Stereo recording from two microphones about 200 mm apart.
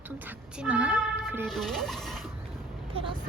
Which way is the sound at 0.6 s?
5° right (ahead or behind).